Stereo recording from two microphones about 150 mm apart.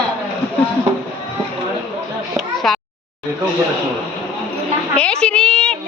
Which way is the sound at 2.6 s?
Centre (ahead or behind).